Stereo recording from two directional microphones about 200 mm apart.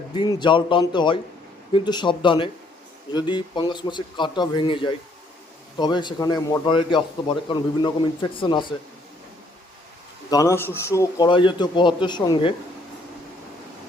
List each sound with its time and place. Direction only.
0.1 s a man's voice: 20° left (ahead or behind)
10.2 s a man's voice: 15° left (ahead or behind)